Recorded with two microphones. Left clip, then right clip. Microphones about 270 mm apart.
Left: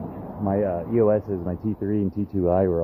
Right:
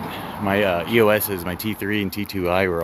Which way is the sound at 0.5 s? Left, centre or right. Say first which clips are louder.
Right 4 dB; right.